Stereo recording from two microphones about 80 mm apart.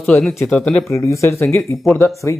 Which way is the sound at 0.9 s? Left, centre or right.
Left.